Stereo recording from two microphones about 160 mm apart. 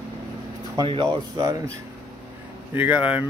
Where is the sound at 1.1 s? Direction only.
20° right (ahead or behind).